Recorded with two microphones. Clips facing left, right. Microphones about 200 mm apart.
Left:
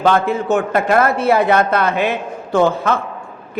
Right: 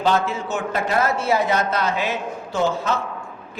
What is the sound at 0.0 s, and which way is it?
A man's voice, 55° left (ahead or behind).